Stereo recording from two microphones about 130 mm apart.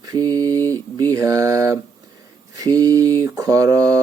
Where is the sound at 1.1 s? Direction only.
25° right (ahead or behind).